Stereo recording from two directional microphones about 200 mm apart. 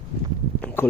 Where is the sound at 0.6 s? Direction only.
5° left (ahead or behind).